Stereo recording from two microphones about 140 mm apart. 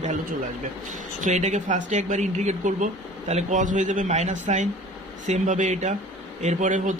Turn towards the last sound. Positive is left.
turn(degrees=-65)  # may be behind; listen again after turning